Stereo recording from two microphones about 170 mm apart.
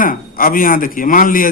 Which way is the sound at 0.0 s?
55° left (ahead or behind).